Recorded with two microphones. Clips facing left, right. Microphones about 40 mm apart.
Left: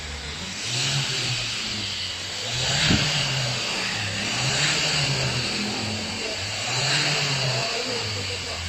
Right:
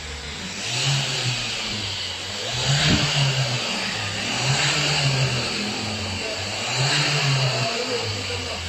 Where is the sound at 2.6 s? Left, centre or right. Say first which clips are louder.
Right 1 dB; centre.